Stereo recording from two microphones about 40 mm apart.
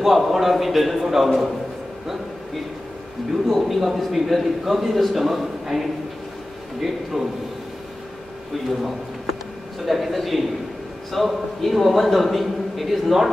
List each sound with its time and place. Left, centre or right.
0.0 s a man's voice: centre
3.4 s a man's voice: centre
7.2 s a man's voice: centre
8.6 s a sound: centre
9.8 s a man's voice: centre